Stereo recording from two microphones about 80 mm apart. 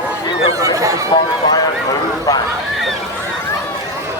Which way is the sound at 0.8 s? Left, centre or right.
Right.